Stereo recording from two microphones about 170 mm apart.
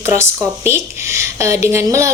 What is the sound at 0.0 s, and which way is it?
A woman's voice, 15° right (ahead or behind).